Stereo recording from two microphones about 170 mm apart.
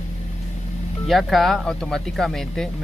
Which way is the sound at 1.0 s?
Centre (ahead or behind).